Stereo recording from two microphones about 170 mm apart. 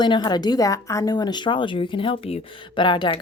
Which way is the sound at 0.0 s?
25° left (ahead or behind).